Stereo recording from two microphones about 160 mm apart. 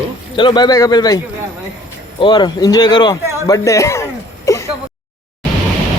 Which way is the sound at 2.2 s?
25° left (ahead or behind).